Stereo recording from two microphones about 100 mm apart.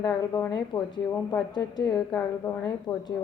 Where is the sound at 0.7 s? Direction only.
55° left (ahead or behind).